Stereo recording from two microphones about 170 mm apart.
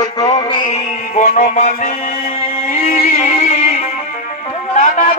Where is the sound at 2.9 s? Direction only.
45° left (ahead or behind).